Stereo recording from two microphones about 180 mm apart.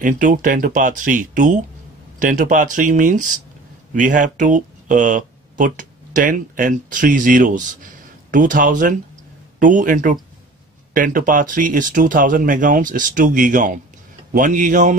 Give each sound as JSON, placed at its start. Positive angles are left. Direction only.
{"t": 0.0, "sound": "speech", "side_deg": -45}